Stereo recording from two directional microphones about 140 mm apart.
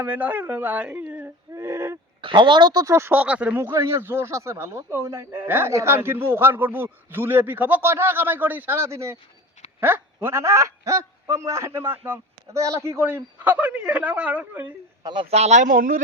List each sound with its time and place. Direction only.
0.0 s speech: 10° right (ahead or behind)
2.2 s speech: 35° right (ahead or behind)
2.8 s speech: 20° right (ahead or behind)
15.0 s speech: 35° right (ahead or behind)
15.3 s speech: 50° right (ahead or behind); by 16.0 s 75° right (ahead or behind)